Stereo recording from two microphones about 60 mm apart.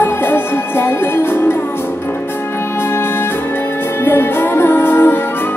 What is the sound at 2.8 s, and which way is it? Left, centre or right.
Music, left.